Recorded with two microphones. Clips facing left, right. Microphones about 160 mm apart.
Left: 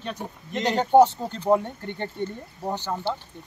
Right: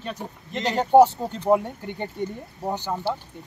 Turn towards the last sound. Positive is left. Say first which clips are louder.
# right 1 dB
turn(degrees=-10)  # may be behind; listen again after turning